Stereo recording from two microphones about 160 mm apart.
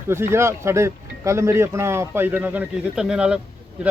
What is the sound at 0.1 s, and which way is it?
A man's voice, 15° right (ahead or behind).